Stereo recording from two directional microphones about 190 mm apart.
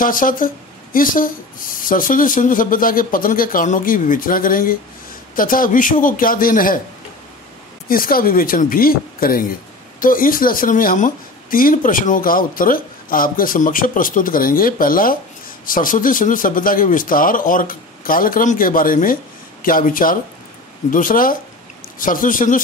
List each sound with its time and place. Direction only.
0.0 s speech: 45° left (ahead or behind)
7.9 s speech: 50° left (ahead or behind)